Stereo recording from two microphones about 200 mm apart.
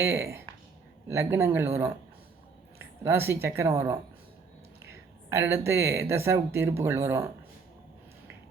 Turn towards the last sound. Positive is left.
turn(degrees=-15)  # may be behind; listen again after turning